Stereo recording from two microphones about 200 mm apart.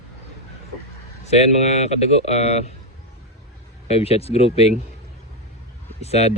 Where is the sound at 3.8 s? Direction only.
30° left (ahead or behind).